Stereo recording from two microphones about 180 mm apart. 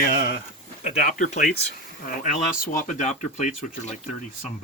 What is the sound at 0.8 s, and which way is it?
Speech, 45° left (ahead or behind).